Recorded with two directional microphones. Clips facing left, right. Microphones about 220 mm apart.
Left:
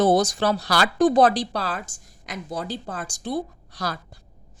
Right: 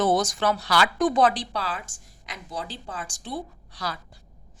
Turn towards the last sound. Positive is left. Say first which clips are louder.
# left 3 dB
turn(degrees=45)  # may be behind; listen again after turning